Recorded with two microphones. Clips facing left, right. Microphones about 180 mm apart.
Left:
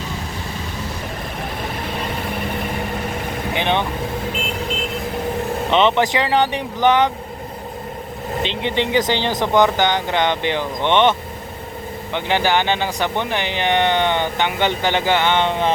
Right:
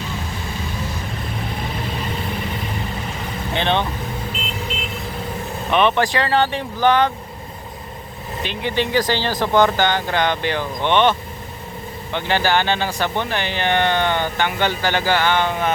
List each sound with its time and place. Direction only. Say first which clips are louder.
3.5 s speech: even; 15° left (ahead or behind)
5.7 s speech: left 1 dB; 20° left (ahead or behind)
8.4 s speech: left 1 dB; 20° left (ahead or behind)
12.1 s speech: left 1 dB; 15° left (ahead or behind)